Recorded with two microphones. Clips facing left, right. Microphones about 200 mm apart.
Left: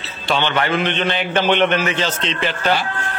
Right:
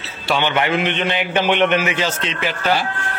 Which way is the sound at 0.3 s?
15° right (ahead or behind).